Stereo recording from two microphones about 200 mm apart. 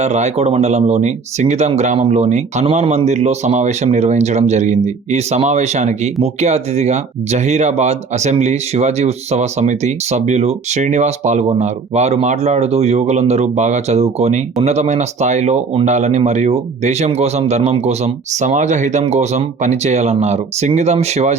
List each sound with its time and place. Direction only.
0.0 s speech: 35° right (ahead or behind)